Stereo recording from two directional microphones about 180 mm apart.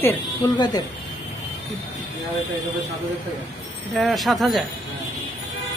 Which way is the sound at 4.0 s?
Centre (ahead or behind).